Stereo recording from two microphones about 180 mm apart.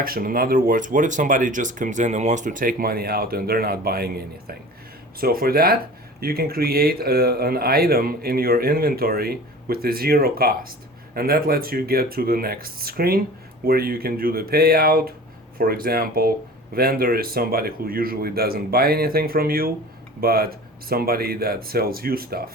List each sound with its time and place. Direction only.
0.0 s speech: 55° right (ahead or behind)